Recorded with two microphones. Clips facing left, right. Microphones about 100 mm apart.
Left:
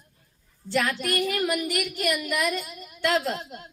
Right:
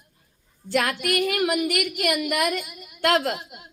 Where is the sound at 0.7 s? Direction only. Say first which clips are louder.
Right 2 dB; 60° right (ahead or behind).